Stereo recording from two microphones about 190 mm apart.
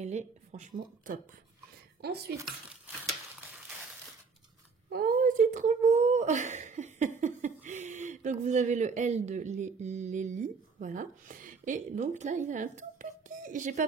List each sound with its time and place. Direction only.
0.0 s speech: 35° right (ahead or behind)
2.0 s speech: 55° right (ahead or behind)
2.4 s a child's voice: 5° right (ahead or behind)
4.8 s speech: 50° right (ahead or behind)